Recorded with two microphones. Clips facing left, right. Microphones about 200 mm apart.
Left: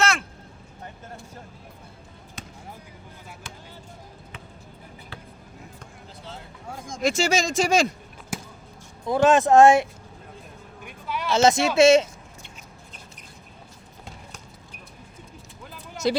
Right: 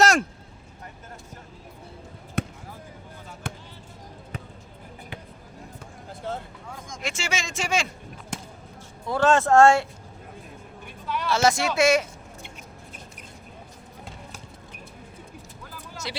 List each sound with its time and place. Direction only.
0.0 s vehicle: 40° right (ahead or behind)
2.4 s basketball bounce: 60° right (ahead or behind)
6.7 s speech: 30° left (ahead or behind)
8.3 s basketball bounce: 5° left (ahead or behind)
9.0 s speech: 20° left (ahead or behind)
10.8 s a sound: 10° left (ahead or behind)
11.3 s speech: 20° left (ahead or behind)
16.0 s speech: 45° left (ahead or behind)